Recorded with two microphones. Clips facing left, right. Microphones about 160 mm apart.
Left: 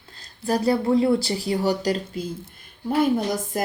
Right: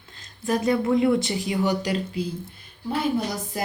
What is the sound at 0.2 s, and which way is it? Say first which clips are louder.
Speech: left 1 dB; 35° left (ahead or behind).